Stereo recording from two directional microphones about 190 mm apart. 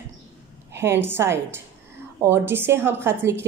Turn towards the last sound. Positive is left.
turn(degrees=-15)  # may be behind; listen again after turning